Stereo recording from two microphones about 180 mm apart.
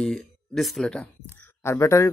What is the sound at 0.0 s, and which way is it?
A man's voice, 5° left (ahead or behind).